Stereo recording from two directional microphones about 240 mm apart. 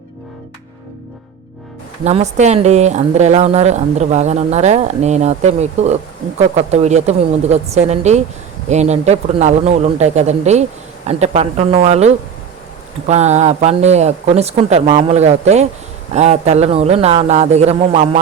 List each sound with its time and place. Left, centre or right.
2.0 s a woman's voice: right